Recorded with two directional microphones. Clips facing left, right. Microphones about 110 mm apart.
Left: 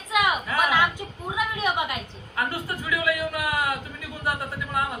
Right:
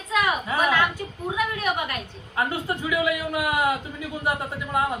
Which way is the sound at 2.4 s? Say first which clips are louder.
Right 3 dB; 20° right (ahead or behind).